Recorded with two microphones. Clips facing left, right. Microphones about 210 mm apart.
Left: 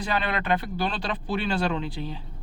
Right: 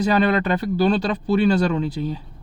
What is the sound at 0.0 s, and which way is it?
Speech, 40° right (ahead or behind).